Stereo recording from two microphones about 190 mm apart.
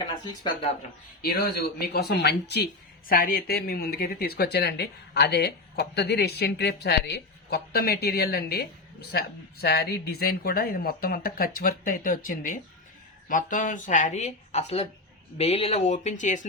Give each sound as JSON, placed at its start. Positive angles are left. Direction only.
{"t": 1.2, "sound": "speech", "side_deg": 55}
{"t": 3.1, "sound": "speech", "side_deg": 50}